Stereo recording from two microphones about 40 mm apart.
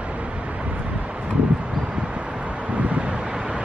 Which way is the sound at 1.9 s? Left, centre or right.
Right.